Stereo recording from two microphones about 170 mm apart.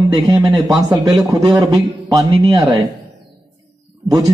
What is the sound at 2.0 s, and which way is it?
Speech, 25° right (ahead or behind).